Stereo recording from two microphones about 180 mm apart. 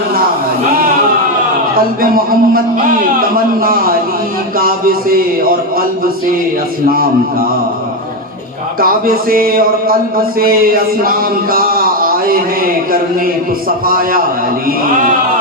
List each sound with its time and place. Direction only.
2.0 s speech: 50° right (ahead or behind)
8.8 s speech: 55° right (ahead or behind)